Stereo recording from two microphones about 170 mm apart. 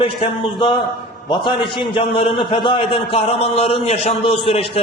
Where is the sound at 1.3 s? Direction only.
30° left (ahead or behind).